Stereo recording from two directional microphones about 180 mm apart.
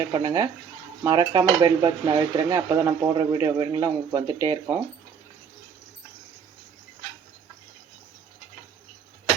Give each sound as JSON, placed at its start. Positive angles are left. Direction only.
{"t": 0.1, "sound": "dishes", "side_deg": -20}